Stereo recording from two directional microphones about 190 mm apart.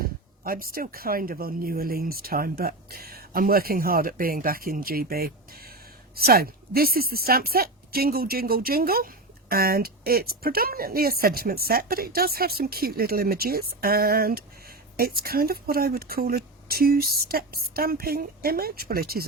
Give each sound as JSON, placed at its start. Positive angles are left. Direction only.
{"t": 0.0, "sound": "speech", "side_deg": -50}